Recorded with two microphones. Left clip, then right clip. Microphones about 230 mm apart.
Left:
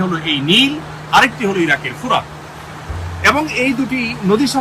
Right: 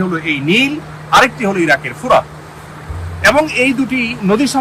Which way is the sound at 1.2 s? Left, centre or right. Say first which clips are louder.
Right 2 dB; right.